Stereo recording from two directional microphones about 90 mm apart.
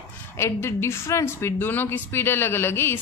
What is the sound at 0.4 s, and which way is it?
Speech, 30° left (ahead or behind).